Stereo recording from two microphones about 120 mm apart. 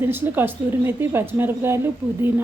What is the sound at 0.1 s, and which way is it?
A woman's voice, 15° right (ahead or behind).